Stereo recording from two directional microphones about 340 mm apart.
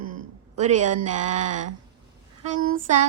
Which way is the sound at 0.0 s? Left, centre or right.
Right.